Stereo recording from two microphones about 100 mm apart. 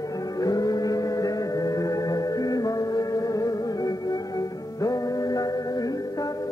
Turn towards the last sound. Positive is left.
turn(degrees=40)  # may be behind; listen again after turning